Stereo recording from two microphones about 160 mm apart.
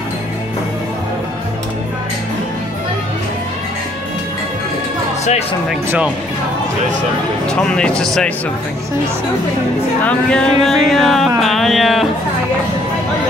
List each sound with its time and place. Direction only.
5.2 s speech: 45° left (ahead or behind)
7.4 s music: 5° left (ahead or behind)
10.0 s music: 5° left (ahead or behind)